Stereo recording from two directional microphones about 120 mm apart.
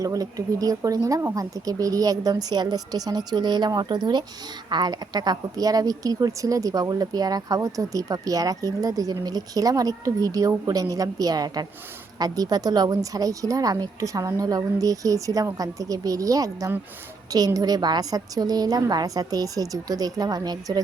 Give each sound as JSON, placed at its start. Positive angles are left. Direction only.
{"t": 0.0, "sound": "speech", "side_deg": -30}